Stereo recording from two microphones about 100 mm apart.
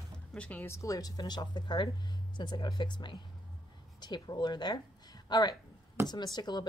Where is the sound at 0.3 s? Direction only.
15° left (ahead or behind).